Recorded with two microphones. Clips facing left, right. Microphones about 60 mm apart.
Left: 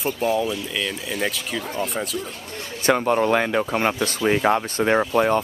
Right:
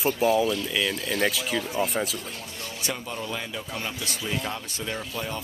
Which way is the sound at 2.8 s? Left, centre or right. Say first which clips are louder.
Left 15 dB; left.